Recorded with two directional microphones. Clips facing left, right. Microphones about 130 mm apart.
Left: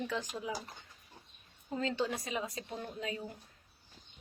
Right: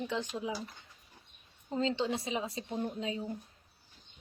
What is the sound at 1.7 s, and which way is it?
Speech, 25° right (ahead or behind).